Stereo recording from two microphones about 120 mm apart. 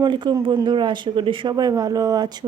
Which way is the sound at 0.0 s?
40° right (ahead or behind).